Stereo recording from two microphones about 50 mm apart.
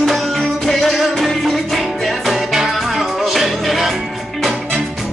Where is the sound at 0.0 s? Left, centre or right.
Centre.